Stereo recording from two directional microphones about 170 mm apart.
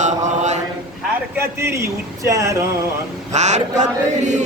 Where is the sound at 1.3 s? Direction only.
15° right (ahead or behind).